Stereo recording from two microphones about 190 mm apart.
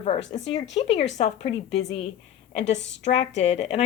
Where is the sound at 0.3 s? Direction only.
40° left (ahead or behind).